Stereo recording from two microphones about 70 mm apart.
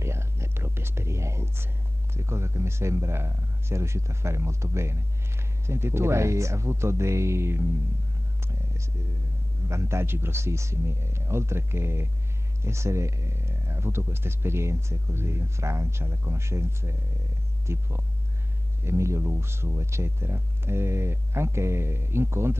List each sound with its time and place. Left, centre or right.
0.0 s whispering: right
2.1 s speech: right
9.7 s speech: right